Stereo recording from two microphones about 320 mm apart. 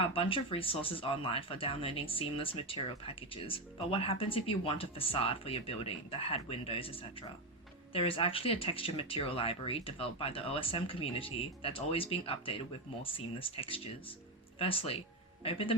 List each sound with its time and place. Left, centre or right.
0.1 s speech: centre